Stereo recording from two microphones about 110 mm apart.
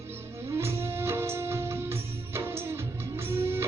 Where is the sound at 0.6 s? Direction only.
25° right (ahead or behind).